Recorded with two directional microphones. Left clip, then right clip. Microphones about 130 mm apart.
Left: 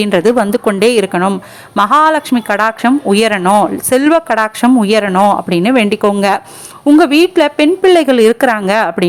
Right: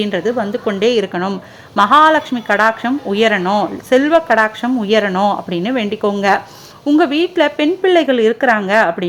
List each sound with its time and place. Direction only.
0.0 s speech: 40° left (ahead or behind)